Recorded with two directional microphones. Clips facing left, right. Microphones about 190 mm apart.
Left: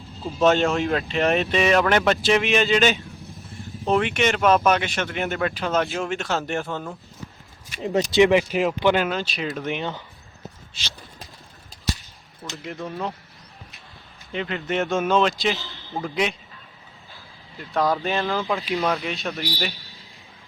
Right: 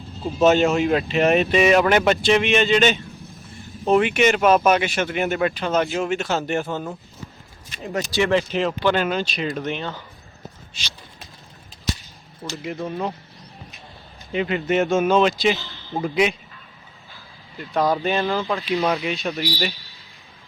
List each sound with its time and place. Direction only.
0.3 s speech: 5° right (ahead or behind)
7.7 s speech: 20° left (ahead or behind)
9.0 s speech: centre (ahead or behind)
9.7 s speech: 15° left (ahead or behind)
10.8 s speech: 15° right (ahead or behind)
12.4 s speech: 25° right (ahead or behind)
14.3 s speech: 10° right (ahead or behind)
15.9 s speech: 15° right (ahead or behind)
17.6 s speech: centre (ahead or behind)